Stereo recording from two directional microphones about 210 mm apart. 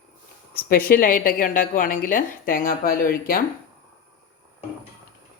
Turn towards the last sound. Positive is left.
turn(degrees=45)  # may be behind; listen again after turning